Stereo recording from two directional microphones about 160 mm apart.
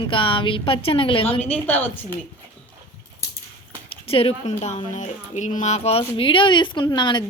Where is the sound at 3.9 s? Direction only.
35° left (ahead or behind).